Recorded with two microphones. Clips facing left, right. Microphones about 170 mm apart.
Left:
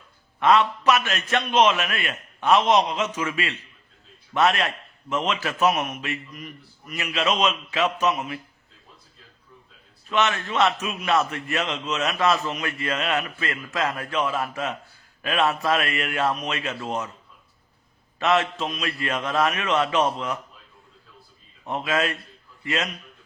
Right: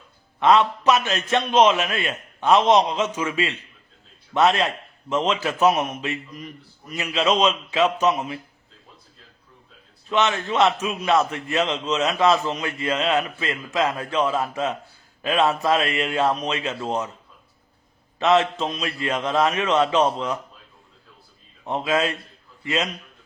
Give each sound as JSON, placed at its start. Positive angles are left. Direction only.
{"t": 0.4, "sound": "a man's voice", "side_deg": -20}
{"t": 10.1, "sound": "a man's voice", "side_deg": -20}
{"t": 18.2, "sound": "a man's voice", "side_deg": -25}
{"t": 21.7, "sound": "a man's voice", "side_deg": -25}